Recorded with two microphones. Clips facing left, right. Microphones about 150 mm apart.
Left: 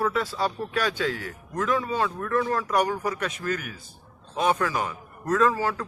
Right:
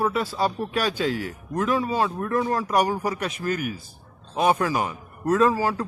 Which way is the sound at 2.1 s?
30° right (ahead or behind).